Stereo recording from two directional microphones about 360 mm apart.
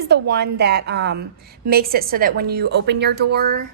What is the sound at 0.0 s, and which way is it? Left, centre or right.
A woman's voice, right.